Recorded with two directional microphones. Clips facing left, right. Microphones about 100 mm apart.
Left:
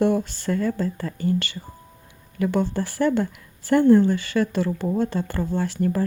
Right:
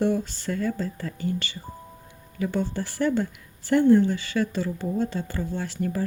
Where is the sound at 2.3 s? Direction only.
70° left (ahead or behind).